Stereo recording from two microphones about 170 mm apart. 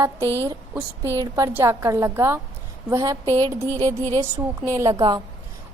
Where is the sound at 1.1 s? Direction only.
20° right (ahead or behind).